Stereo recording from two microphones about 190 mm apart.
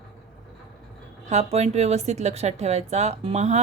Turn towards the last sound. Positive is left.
turn(degrees=-35)  # may be behind; listen again after turning